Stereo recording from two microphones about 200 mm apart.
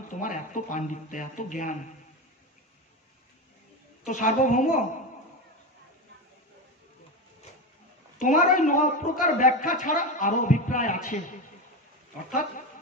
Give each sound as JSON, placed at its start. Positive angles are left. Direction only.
{"t": 0.1, "sound": "a woman's voice", "side_deg": 40}
{"t": 4.0, "sound": "a woman's voice", "side_deg": 40}
{"t": 8.2, "sound": "a woman's voice", "side_deg": 40}